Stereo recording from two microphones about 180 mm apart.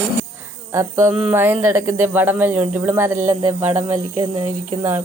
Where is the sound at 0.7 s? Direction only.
15° right (ahead or behind).